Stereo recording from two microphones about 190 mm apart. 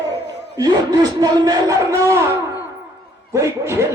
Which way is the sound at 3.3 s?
15° right (ahead or behind).